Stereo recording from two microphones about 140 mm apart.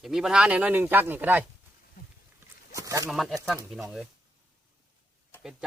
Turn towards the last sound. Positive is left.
turn(degrees=-5)  # may be behind; listen again after turning